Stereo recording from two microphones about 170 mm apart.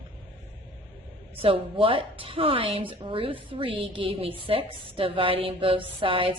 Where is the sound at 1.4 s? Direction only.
30° right (ahead or behind).